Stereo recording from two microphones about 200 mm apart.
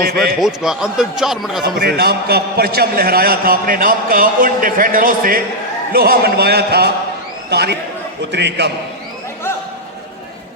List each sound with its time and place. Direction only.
0.0 s a man's voice: 50° right (ahead or behind)
0.3 s speech: centre (ahead or behind)
1.8 s a man's voice: 55° right (ahead or behind)